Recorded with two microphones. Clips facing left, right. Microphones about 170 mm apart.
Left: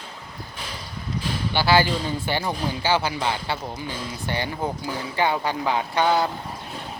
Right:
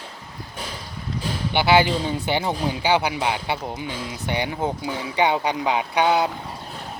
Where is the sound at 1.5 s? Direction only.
20° right (ahead or behind).